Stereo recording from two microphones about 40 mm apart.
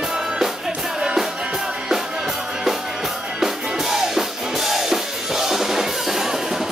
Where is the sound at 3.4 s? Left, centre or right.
Centre.